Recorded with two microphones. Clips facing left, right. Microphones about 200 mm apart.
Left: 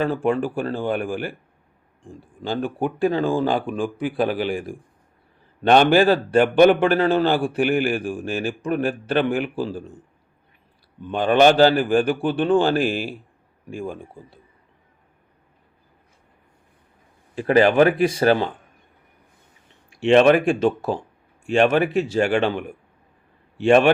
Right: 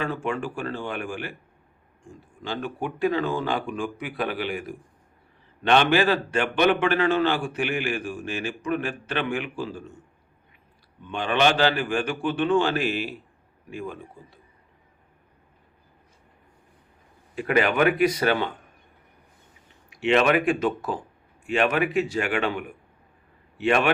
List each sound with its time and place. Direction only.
0.0 s a man's voice: 35° left (ahead or behind)
11.0 s a man's voice: 35° left (ahead or behind)
17.3 s a man's voice: 30° left (ahead or behind)
20.1 s speech: 35° left (ahead or behind)
23.6 s a man's voice: 30° left (ahead or behind)